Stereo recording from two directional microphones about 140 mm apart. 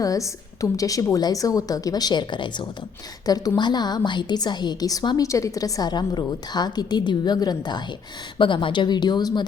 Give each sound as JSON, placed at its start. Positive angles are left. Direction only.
{"t": 0.0, "sound": "a woman's voice", "side_deg": 25}